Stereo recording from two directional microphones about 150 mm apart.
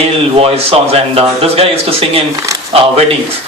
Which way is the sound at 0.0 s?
40° right (ahead or behind).